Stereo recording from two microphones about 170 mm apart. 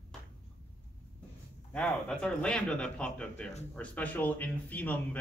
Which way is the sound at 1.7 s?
10° left (ahead or behind).